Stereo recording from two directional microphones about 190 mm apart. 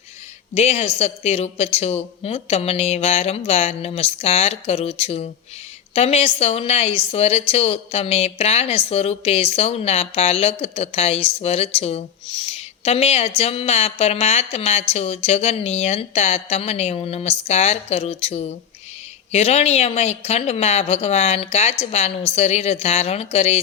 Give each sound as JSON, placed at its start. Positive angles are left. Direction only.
{"t": 0.5, "sound": "a woman's voice", "side_deg": 35}